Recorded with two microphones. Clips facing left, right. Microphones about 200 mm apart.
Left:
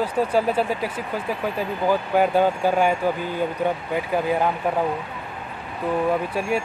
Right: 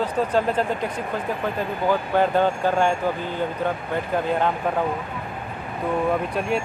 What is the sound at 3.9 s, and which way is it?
Speech, 5° left (ahead or behind).